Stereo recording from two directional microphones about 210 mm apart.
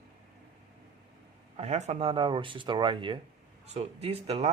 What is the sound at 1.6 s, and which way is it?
Speech, 30° right (ahead or behind).